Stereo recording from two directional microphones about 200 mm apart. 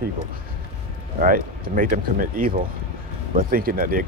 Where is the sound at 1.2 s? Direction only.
40° right (ahead or behind).